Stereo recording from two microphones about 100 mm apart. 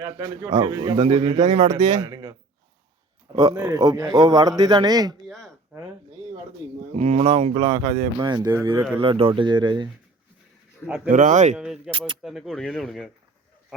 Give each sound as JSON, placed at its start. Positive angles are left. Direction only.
{"t": 0.0, "sound": "a man's voice", "side_deg": -35}
{"t": 0.9, "sound": "speech", "side_deg": -90}
{"t": 1.3, "sound": "a man's voice", "side_deg": -40}
{"t": 3.3, "sound": "a man's voice", "side_deg": -40}
{"t": 5.2, "sound": "a sound", "side_deg": 5}
{"t": 6.9, "sound": "speech", "side_deg": -90}
{"t": 7.3, "sound": "speech", "side_deg": -60}
{"t": 9.0, "sound": "speech", "side_deg": -65}
{"t": 10.8, "sound": "speech", "side_deg": -15}
{"t": 11.9, "sound": "speech", "side_deg": -55}
{"t": 12.2, "sound": "speech", "side_deg": 0}